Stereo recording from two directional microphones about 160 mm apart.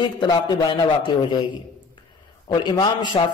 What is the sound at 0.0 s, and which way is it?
Speech, 30° left (ahead or behind).